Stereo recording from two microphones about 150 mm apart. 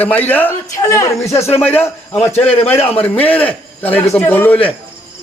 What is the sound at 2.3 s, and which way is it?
Speech, 40° left (ahead or behind).